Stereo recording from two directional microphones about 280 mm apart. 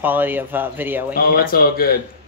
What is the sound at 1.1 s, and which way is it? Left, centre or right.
Speech, left.